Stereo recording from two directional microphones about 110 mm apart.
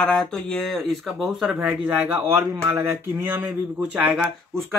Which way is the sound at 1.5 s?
15° right (ahead or behind).